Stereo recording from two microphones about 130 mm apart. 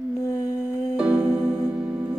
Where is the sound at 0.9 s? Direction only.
5° right (ahead or behind).